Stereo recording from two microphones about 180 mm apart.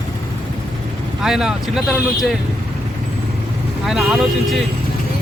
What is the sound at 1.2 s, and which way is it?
Speech, 5° right (ahead or behind).